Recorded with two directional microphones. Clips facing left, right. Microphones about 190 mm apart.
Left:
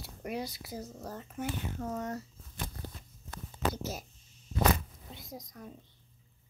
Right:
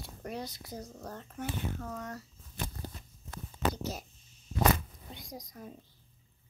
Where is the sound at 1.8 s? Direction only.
25° left (ahead or behind).